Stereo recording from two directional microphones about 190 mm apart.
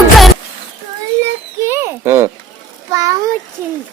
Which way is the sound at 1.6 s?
15° right (ahead or behind).